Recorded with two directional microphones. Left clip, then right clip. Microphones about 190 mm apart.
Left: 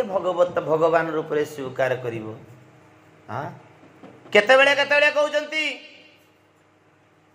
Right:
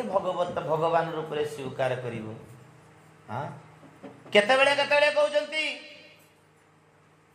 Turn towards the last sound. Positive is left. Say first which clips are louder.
# left 3 dB
turn(degrees=20)  # may be behind; listen again after turning